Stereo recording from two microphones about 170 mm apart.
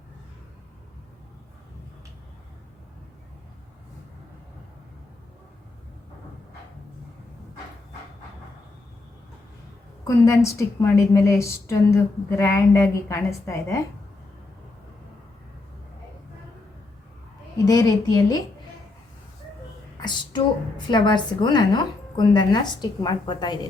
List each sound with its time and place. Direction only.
10.0 s a woman's voice: 20° left (ahead or behind)
17.7 s a woman's voice: 20° left (ahead or behind)
20.0 s a sound: 25° left (ahead or behind)
20.8 s a woman's voice: 25° left (ahead or behind)